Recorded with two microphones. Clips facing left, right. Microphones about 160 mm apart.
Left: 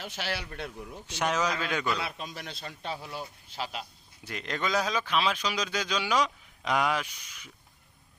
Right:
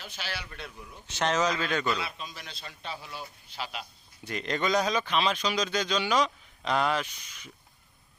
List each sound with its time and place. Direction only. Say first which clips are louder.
0.0 s a man's voice: left 4 dB; 60° left (ahead or behind)
1.0 s speech: right 2 dB; 10° left (ahead or behind)
2.0 s a man's voice: left 3 dB; 55° left (ahead or behind); by 3.8 s 35° left (ahead or behind)
4.2 s speech: right 3 dB; 5° left (ahead or behind)